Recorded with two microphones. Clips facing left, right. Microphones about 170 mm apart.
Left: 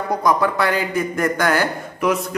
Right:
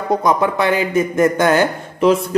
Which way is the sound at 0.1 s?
20° right (ahead or behind).